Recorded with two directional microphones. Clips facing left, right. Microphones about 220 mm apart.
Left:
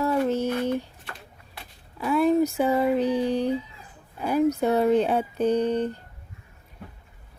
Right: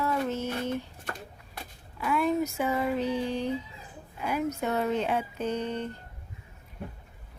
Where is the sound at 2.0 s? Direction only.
35° left (ahead or behind).